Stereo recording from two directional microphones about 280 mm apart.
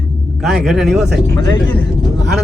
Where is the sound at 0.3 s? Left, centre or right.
Centre.